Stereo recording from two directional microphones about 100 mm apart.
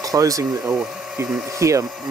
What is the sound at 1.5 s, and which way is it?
Speech, 30° right (ahead or behind).